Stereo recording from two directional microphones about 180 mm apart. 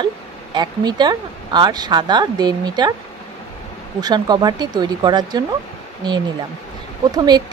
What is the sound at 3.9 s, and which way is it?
Speech, 20° right (ahead or behind).